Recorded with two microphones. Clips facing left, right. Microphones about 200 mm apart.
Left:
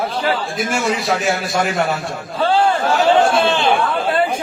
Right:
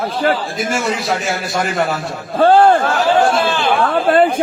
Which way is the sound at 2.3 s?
50° right (ahead or behind).